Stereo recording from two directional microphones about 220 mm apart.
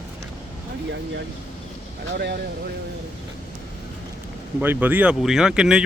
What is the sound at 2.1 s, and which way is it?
Speech, 50° right (ahead or behind).